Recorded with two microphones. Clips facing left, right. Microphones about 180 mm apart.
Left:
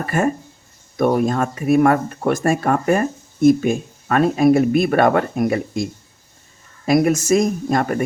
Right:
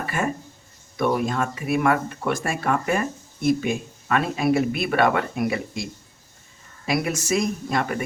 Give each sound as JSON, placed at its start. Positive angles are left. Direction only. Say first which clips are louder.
{"t": 0.0, "sound": "speech", "louder": "left 7 dB", "side_deg": 45}